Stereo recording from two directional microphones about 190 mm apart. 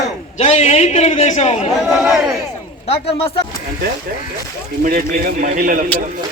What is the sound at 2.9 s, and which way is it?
Speech, 30° left (ahead or behind).